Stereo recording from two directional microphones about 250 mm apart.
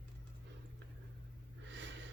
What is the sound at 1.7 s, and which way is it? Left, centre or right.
Snort, right.